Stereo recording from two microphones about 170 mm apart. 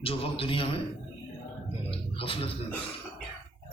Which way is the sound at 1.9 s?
35° left (ahead or behind).